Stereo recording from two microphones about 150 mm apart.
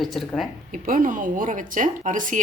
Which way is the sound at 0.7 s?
65° right (ahead or behind).